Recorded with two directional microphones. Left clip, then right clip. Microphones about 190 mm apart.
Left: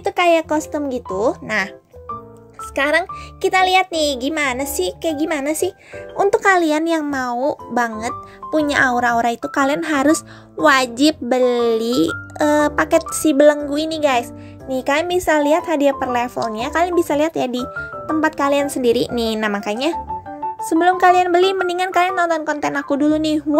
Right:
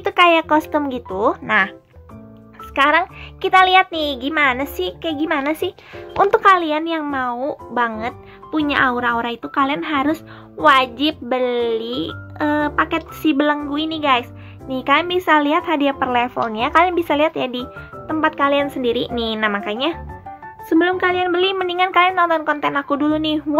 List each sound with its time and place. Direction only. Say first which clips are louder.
0.0 s speech: right 2 dB; 20° left (ahead or behind)
1.3 s a woman's voice: right 4 dB; 25° left (ahead or behind)
2.7 s a child's voice: right 2 dB; 20° left (ahead or behind)
6.4 s speech: right 1 dB; 35° left (ahead or behind)
8.5 s a woman's voice: left 1 dB; 35° left (ahead or behind)
21.0 s a woman's voice: left 5 dB; 40° left (ahead or behind)